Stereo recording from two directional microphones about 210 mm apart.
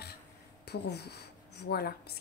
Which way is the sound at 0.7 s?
50° left (ahead or behind).